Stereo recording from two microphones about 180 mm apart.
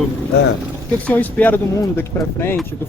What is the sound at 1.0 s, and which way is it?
Speech, 10° left (ahead or behind).